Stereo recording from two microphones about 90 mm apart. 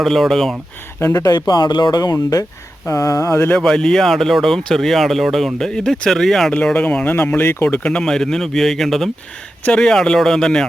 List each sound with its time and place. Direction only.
0.0 s speech: centre (ahead or behind)
1.1 s speech: 45° left (ahead or behind); by 3.5 s 30° left (ahead or behind)
3.6 s speech: 5° left (ahead or behind)
6.5 s speech: 15° left (ahead or behind)
7.9 s speech: 5° left (ahead or behind)